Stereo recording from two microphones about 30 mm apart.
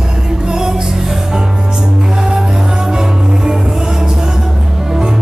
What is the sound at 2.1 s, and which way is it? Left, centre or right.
Music, right.